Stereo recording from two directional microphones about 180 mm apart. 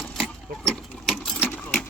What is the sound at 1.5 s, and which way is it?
Sewing machine, 10° left (ahead or behind).